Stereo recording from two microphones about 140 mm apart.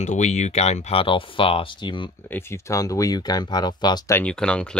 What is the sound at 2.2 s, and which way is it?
Speech, 15° left (ahead or behind).